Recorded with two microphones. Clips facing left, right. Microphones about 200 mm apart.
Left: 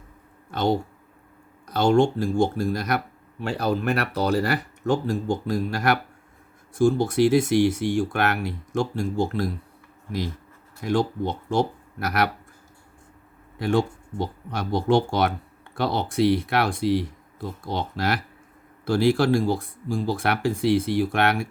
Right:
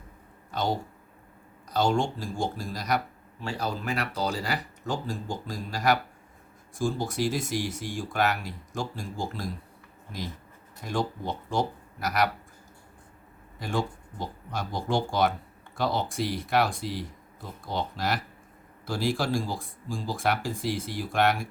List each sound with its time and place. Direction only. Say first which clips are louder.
0.5 s speech: left 6 dB; 65° left (ahead or behind)
10.8 s speech: left 7 dB; 65° left (ahead or behind)
13.6 s speech: left 8 dB; 65° left (ahead or behind)